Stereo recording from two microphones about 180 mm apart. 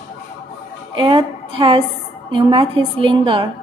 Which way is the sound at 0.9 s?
25° right (ahead or behind).